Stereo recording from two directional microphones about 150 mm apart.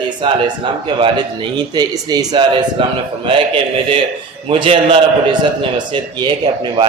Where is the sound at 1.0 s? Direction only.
30° right (ahead or behind).